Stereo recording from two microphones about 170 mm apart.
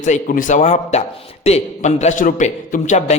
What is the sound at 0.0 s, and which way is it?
A man's voice, 45° left (ahead or behind).